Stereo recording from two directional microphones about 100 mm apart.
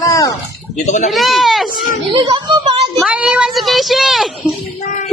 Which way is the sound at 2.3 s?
55° right (ahead or behind).